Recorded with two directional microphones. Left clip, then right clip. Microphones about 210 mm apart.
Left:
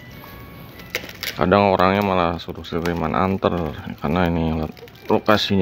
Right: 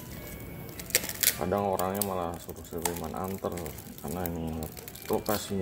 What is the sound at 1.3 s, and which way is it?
Speech, 45° left (ahead or behind).